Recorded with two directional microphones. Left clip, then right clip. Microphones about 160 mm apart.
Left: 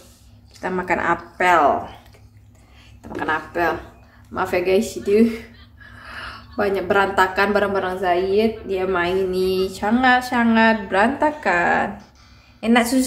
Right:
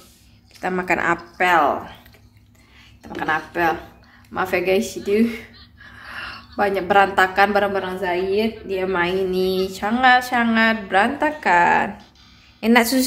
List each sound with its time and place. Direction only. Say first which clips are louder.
0.6 s a woman's voice: right 1 dB; 25° right (ahead or behind)
1.4 s speech: left 1 dB; 5° right (ahead or behind)
3.2 s speech: even; 10° right (ahead or behind)
12.5 s a woman's voice: right 1 dB; 35° right (ahead or behind)